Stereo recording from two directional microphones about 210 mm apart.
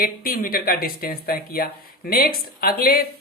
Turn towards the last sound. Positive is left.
turn(degrees=45)  # may be behind; listen again after turning